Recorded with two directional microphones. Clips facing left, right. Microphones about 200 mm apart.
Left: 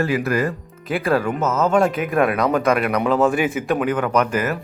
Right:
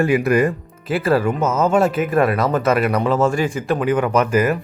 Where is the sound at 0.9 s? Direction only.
5° right (ahead or behind).